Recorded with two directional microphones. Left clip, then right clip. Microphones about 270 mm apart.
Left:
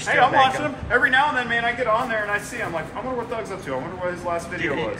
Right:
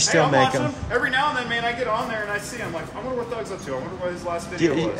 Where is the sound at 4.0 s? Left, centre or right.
Centre.